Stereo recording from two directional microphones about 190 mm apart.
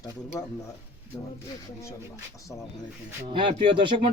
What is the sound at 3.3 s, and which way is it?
Speech, 30° right (ahead or behind).